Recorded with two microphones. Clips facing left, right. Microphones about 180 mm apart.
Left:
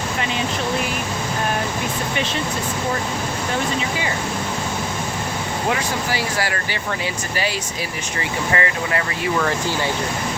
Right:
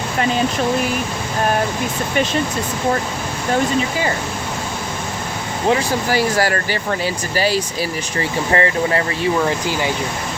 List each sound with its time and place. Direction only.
6.1 s speech: 45° right (ahead or behind)
9.4 s speech: 15° right (ahead or behind)